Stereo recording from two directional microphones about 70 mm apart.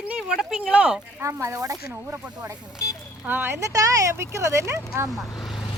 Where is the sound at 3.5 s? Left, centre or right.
Right.